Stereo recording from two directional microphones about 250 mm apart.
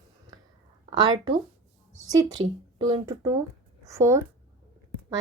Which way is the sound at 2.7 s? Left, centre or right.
Centre.